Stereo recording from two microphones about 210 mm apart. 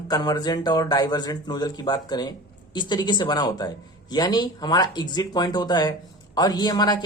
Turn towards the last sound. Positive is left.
turn(degrees=20)  # may be behind; listen again after turning